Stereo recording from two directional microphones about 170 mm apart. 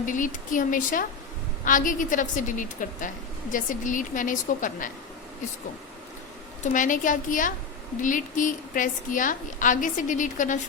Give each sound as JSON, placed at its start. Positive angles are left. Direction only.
{"t": 0.0, "sound": "a woman's voice", "side_deg": 50}
{"t": 6.6, "sound": "a woman's voice", "side_deg": 50}